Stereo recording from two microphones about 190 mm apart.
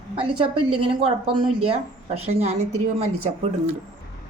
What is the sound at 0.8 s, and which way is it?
A woman's voice, 30° right (ahead or behind).